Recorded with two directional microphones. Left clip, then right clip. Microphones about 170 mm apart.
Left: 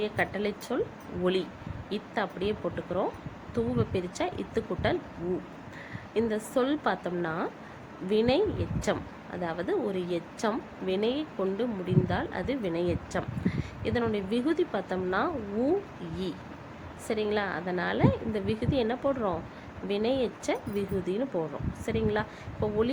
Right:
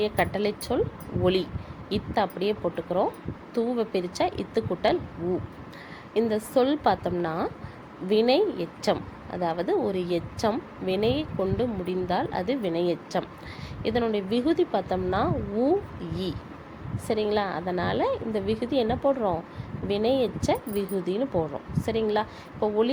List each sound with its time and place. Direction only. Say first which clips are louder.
0.0 s a woman's voice: right 4 dB; 20° right (ahead or behind)
6.1 s a woman's voice: right 5 dB; 15° right (ahead or behind)
17.1 s a woman's voice: right 4 dB; 15° right (ahead or behind)